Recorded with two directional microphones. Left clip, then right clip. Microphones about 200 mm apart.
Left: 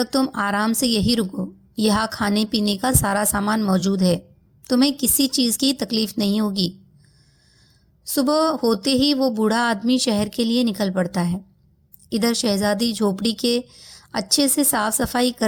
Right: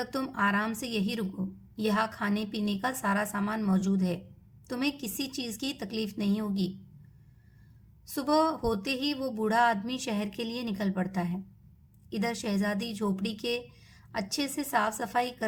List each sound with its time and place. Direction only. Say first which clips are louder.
0.0 s a woman's voice: left 8 dB; 35° left (ahead or behind)
8.0 s a woman's voice: left 7 dB; 35° left (ahead or behind)